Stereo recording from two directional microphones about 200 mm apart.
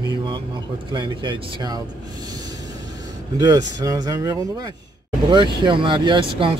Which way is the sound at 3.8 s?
15° right (ahead or behind).